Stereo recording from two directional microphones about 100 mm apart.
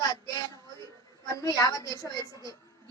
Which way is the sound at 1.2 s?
35° left (ahead or behind).